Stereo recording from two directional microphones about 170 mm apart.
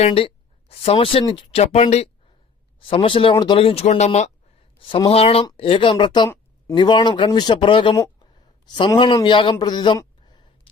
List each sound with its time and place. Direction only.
0.0 s speech: 35° left (ahead or behind)
4.8 s speech: 30° left (ahead or behind)
8.0 s a sound: 25° left (ahead or behind)